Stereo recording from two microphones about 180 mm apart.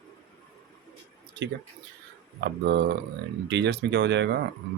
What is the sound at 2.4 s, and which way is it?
Speech, 70° right (ahead or behind).